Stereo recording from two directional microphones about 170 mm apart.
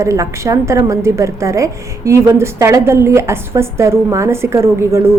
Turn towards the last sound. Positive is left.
turn(degrees=-15)  # may be behind; listen again after turning